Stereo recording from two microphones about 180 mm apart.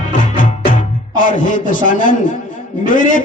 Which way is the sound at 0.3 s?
50° left (ahead or behind).